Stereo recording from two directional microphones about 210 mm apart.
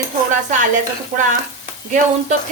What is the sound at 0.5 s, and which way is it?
Speech, 35° right (ahead or behind).